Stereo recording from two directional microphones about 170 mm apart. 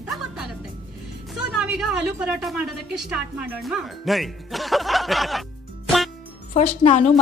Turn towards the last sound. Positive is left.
turn(degrees=40)  # may be behind; listen again after turning